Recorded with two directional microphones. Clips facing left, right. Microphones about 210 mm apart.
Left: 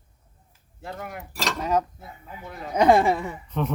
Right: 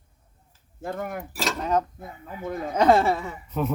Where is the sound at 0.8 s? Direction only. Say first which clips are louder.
Right 5 dB; 50° right (ahead or behind).